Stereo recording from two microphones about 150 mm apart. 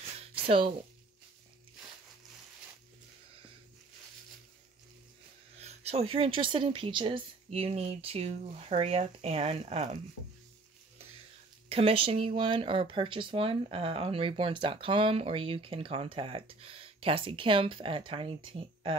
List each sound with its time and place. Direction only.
0.2 s a sound: 35° right (ahead or behind)
5.6 s speech: 45° right (ahead or behind)
11.7 s speech: 40° right (ahead or behind)